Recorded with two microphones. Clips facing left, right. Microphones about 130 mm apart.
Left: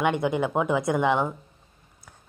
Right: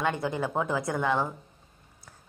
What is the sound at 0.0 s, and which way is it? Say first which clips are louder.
A woman's voice: left 5 dB; 15° left (ahead or behind).